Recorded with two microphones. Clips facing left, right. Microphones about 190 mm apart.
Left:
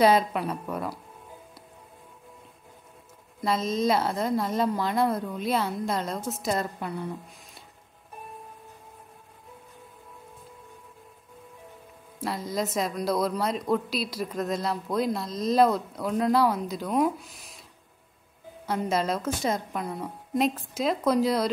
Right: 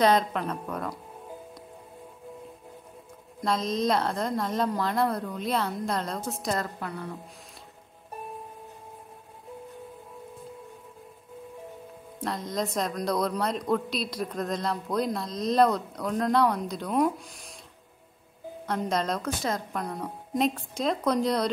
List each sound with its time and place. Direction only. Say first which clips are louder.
0.0 s speech: left 2 dB; 5° left (ahead or behind)
3.3 s a woman's voice: left 1 dB; 5° left (ahead or behind)
6.6 s a woman's voice: left 2 dB; 20° left (ahead or behind)
12.2 s a woman's voice: left 1 dB; 5° left (ahead or behind)
18.7 s a woman's voice: left 1 dB; 5° left (ahead or behind)